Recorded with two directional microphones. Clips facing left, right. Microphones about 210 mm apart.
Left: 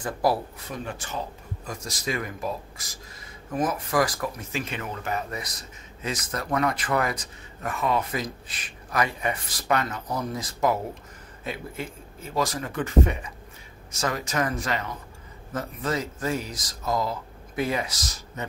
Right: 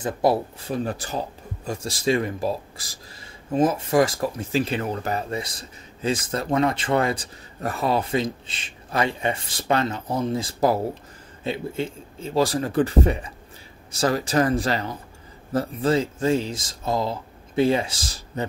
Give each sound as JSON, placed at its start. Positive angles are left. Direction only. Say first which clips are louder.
{"t": 0.0, "sound": "speech", "louder": "right 4 dB", "side_deg": -25}